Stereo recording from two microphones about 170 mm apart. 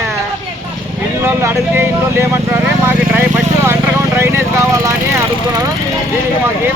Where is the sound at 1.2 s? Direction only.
15° right (ahead or behind).